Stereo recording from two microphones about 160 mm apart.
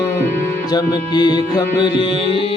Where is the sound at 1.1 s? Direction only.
25° left (ahead or behind).